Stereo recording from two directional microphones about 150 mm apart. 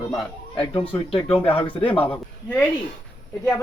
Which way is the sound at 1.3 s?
40° left (ahead or behind).